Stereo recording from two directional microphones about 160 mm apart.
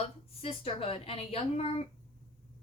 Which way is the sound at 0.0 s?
40° left (ahead or behind).